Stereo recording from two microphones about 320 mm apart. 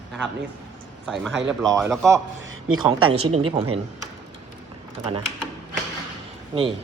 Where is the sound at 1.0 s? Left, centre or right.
Centre.